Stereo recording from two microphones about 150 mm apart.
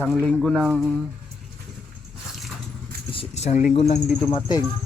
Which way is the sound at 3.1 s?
40° left (ahead or behind).